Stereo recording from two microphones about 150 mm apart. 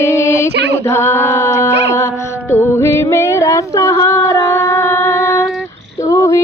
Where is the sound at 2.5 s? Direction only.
15° left (ahead or behind).